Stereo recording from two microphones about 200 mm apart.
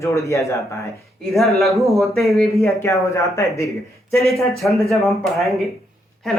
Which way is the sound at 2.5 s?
15° left (ahead or behind).